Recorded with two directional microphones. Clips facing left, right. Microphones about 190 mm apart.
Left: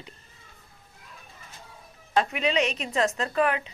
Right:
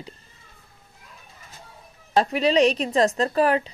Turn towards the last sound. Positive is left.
turn(degrees=-35)  # may be behind; listen again after turning